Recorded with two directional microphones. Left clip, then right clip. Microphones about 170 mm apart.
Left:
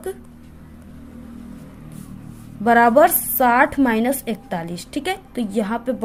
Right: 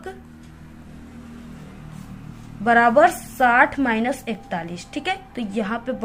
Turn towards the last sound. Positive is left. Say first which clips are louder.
# left 3 dB
turn(degrees=35)  # may be behind; listen again after turning